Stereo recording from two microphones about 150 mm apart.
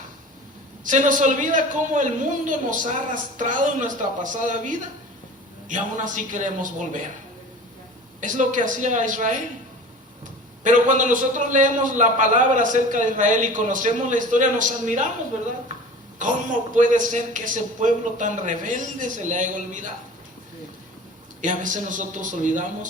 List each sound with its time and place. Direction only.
0.9 s a man's voice: 55° right (ahead or behind)
8.2 s a man's voice: 60° right (ahead or behind)
10.6 s a man's voice: 55° right (ahead or behind)
16.1 s a man's voice: 55° right (ahead or behind)
21.4 s a man's voice: 60° right (ahead or behind)